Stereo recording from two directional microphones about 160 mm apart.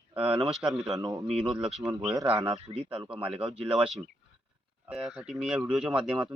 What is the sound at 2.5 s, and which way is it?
Speech, 35° right (ahead or behind).